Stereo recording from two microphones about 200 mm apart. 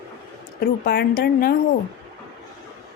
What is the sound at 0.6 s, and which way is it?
Speech, 50° left (ahead or behind).